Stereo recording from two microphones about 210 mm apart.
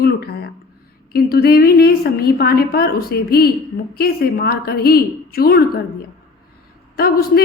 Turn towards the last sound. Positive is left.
turn(degrees=45)  # may be behind; listen again after turning